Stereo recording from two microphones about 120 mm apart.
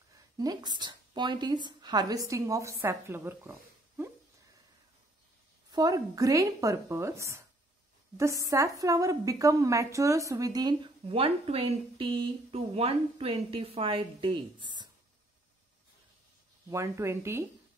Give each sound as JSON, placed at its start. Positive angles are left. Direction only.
{"t": 0.4, "sound": "a woman's voice", "side_deg": -35}
{"t": 5.7, "sound": "a woman's voice", "side_deg": -35}
{"t": 16.7, "sound": "speech", "side_deg": -25}